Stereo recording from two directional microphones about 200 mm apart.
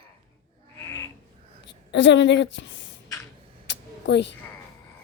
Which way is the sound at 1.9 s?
65° left (ahead or behind).